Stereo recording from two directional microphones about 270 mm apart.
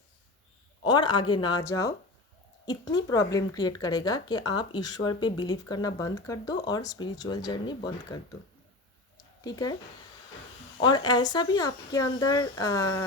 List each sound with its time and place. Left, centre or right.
0.9 s speech: centre
9.4 s speech: centre
10.8 s speech: centre